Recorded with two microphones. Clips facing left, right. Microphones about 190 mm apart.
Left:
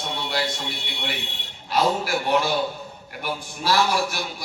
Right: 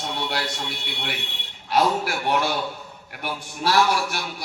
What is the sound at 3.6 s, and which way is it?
Speech, 65° right (ahead or behind).